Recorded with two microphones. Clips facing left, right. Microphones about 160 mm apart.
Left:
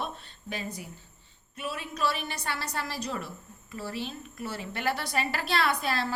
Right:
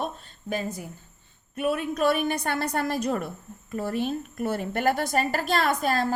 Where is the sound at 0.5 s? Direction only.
45° right (ahead or behind).